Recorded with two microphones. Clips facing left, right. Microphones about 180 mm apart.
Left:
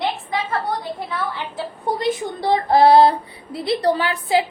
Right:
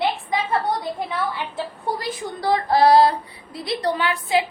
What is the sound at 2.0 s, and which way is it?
A child's voice, 25° left (ahead or behind).